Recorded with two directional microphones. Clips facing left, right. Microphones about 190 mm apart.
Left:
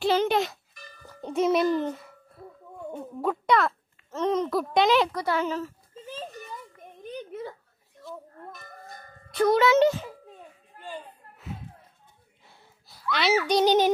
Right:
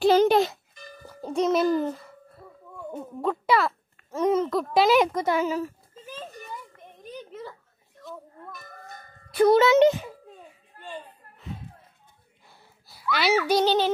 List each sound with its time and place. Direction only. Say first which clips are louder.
0.0 s music: right 5 dB; 40° right (ahead or behind)
1.0 s a child's voice: even; centre (ahead or behind)
3.2 s music: even; centre (ahead or behind)
4.1 s a sound: right 3 dB; 10° right (ahead or behind)
4.5 s speech: right 1 dB; centre (ahead or behind)
5.0 s a child's voice: right 3 dB; 20° right (ahead or behind)
7.1 s a sound: left 3 dB; 60° left (ahead or behind)
9.5 s a child's voice: right 2 dB; 25° right (ahead or behind)
10.0 s a sound: even; 5° right (ahead or behind)
13.7 s child singing: left 2 dB; 15° left (ahead or behind)